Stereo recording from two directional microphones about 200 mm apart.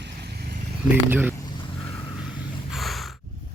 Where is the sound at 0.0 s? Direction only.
55° right (ahead or behind).